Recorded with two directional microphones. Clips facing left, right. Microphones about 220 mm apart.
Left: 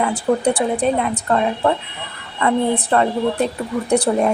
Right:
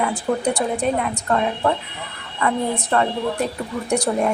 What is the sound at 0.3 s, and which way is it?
Speech, 45° left (ahead or behind).